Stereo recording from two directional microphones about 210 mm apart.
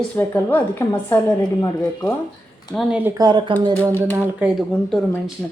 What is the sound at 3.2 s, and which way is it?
Speech, 20° right (ahead or behind).